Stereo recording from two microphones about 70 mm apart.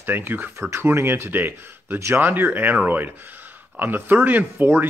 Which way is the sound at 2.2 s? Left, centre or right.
Right.